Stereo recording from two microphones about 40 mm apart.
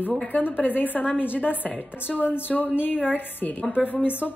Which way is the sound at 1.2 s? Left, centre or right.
Right.